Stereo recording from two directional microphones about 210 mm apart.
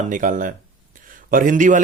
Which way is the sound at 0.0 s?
40° right (ahead or behind).